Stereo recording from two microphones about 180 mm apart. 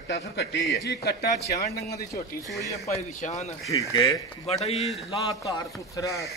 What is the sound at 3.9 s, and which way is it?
Speech, 25° left (ahead or behind).